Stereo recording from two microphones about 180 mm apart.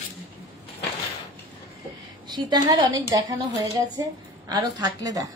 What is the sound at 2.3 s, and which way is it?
A woman's voice, 25° right (ahead or behind).